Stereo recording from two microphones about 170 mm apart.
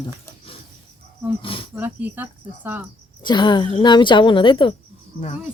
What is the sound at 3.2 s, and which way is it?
Speech, 25° left (ahead or behind).